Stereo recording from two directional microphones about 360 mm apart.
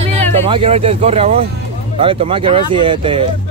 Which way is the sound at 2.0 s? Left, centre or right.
Centre.